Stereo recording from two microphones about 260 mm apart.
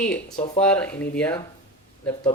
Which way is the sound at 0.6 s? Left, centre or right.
Centre.